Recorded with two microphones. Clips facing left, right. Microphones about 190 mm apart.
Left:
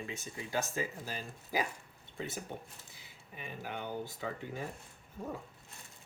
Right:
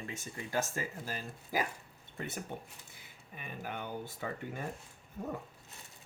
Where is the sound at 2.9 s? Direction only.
50° right (ahead or behind).